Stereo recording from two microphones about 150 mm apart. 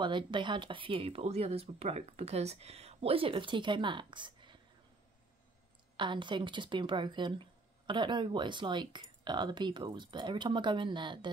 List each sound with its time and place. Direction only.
0.0 s speech: 30° right (ahead or behind)
5.9 s speech: 30° right (ahead or behind)